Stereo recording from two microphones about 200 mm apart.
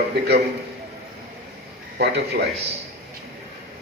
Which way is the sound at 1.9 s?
55° right (ahead or behind).